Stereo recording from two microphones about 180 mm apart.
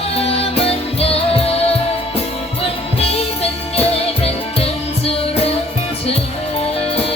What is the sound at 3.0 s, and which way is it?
Music, 35° left (ahead or behind).